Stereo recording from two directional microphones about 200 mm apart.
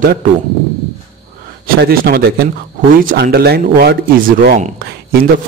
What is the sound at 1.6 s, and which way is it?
Speech, 50° right (ahead or behind).